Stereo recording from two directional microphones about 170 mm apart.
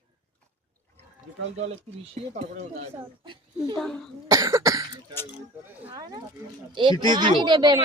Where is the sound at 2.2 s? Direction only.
40° right (ahead or behind).